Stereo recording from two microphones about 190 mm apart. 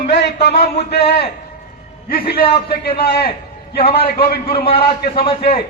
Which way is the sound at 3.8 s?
30° left (ahead or behind).